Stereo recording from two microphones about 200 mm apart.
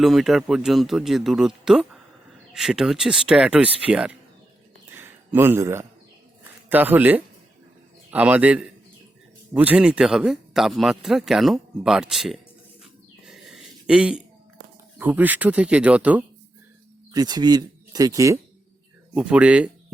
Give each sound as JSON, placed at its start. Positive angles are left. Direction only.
{"t": 0.0, "sound": "speech", "side_deg": 0}
{"t": 4.9, "sound": "a sound", "side_deg": -10}
{"t": 8.1, "sound": "speech", "side_deg": -5}
{"t": 13.2, "sound": "a sound", "side_deg": 0}
{"t": 14.9, "sound": "speech", "side_deg": -10}
{"t": 17.1, "sound": "speech", "side_deg": -20}
{"t": 19.1, "sound": "speech", "side_deg": -5}